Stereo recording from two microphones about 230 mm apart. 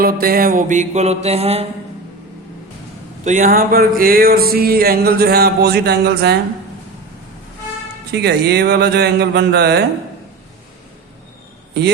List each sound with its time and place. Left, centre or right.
0.0 s music: right
3.2 s music: right
8.1 s speech: right
11.8 s speech: right